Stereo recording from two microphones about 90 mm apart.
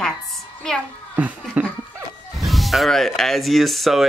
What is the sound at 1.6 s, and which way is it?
Laughter, 15° right (ahead or behind).